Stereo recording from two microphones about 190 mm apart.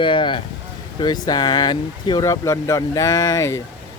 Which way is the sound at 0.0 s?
25° left (ahead or behind).